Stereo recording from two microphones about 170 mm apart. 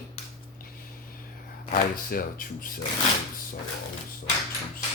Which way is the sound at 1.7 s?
60° left (ahead or behind).